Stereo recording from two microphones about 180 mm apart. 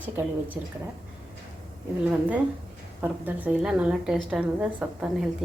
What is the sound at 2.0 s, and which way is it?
A woman's voice, 5° right (ahead or behind).